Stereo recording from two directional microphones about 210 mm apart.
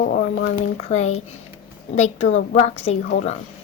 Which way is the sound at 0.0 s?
40° left (ahead or behind).